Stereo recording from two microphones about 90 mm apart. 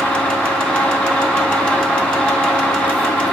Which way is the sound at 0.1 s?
10° left (ahead or behind).